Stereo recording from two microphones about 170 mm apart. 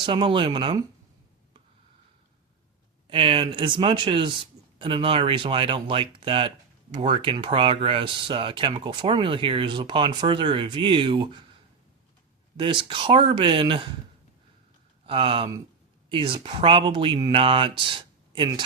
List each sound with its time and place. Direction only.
0.0 s speech: 30° right (ahead or behind)
3.1 s speech: 30° right (ahead or behind)
12.5 s speech: 30° right (ahead or behind)
15.0 s speech: 30° right (ahead or behind)